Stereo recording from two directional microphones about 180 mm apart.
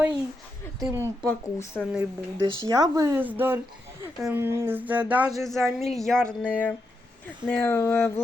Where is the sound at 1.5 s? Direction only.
10° left (ahead or behind).